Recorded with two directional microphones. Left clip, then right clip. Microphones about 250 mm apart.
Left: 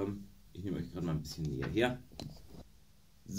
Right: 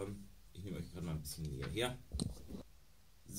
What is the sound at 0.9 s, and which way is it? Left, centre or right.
Speech, centre.